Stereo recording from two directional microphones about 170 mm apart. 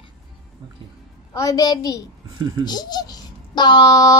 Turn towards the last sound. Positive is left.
turn(degrees=20)  # may be behind; listen again after turning